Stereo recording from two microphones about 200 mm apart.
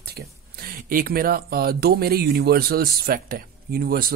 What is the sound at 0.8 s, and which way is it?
Speech, 45° right (ahead or behind).